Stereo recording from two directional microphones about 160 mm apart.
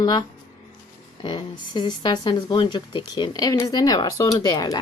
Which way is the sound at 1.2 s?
30° left (ahead or behind).